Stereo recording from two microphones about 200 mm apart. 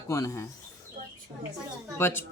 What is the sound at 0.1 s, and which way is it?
Speech, 15° left (ahead or behind).